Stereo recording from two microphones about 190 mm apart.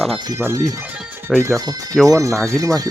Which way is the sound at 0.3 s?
15° right (ahead or behind).